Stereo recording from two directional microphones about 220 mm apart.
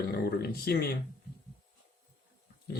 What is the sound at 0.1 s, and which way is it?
Speech, 45° left (ahead or behind).